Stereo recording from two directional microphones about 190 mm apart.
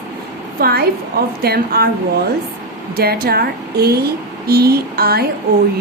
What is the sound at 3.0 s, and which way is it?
A woman's voice, 50° right (ahead or behind).